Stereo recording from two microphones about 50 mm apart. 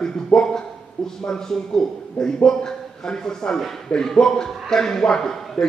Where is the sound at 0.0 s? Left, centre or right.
Centre.